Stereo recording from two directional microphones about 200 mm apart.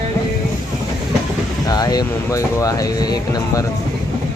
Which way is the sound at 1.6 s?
20° left (ahead or behind).